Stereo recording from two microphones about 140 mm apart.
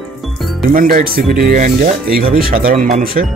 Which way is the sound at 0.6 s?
85° right.